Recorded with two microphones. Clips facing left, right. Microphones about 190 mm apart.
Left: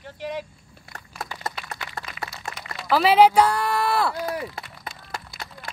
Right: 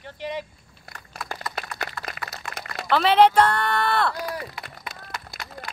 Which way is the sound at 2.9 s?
5° left (ahead or behind).